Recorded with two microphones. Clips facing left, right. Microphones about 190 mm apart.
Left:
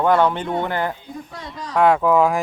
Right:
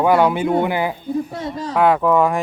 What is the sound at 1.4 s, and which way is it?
Speech, 30° right (ahead or behind).